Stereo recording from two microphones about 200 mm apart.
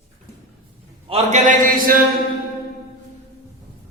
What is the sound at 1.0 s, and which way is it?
Speech, 35° right (ahead or behind).